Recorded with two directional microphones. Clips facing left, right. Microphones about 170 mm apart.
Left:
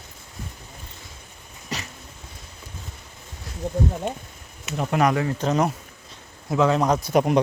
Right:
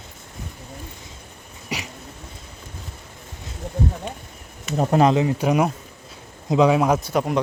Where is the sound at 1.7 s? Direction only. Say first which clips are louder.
Right 2 dB; 10° right (ahead or behind).